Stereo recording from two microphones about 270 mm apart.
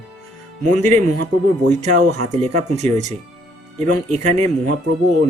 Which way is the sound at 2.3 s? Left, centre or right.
Right.